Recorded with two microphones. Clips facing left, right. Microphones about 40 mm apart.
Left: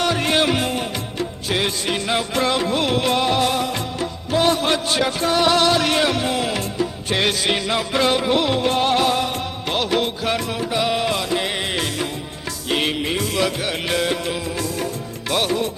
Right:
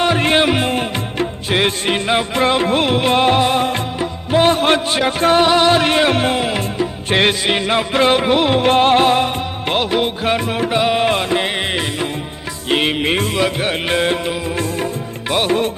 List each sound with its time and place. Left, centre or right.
0.0 s music: right
5.5 s music: right
6.4 s music: right
8.6 s music: right
9.9 s music: right
12.7 s music: right
15.3 s music: right